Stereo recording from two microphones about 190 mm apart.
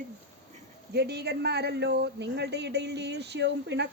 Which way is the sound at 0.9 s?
60° right (ahead or behind).